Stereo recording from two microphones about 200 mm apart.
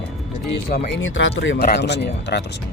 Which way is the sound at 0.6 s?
50° left (ahead or behind).